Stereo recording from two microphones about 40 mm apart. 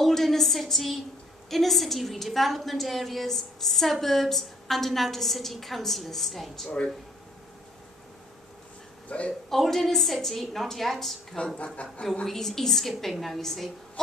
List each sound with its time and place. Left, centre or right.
0.0 s a sound: centre
1.5 s a woman's voice: centre
9.1 s a woman's voice: left
9.5 s a woman's voice: centre
11.3 s a woman's voice: left
12.3 s a woman's voice: centre